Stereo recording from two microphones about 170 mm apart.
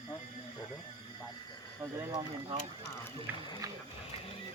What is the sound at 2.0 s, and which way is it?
Speech, 25° right (ahead or behind).